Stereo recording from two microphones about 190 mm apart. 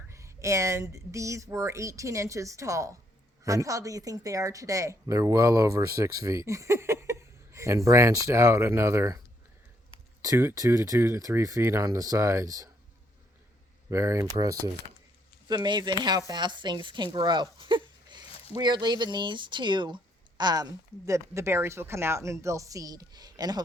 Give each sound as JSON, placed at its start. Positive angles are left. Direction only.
{"t": 0.1, "sound": "a woman's voice", "side_deg": -15}
{"t": 13.9, "sound": "a woman's voice", "side_deg": -15}